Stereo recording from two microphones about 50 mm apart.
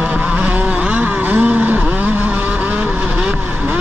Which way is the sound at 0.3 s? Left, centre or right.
Right.